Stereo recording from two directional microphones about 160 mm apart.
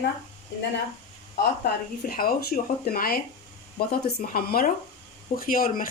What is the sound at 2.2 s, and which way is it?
Speech, 70° left (ahead or behind).